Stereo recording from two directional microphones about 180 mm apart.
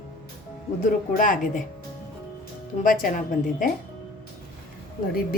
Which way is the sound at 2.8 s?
50° left (ahead or behind).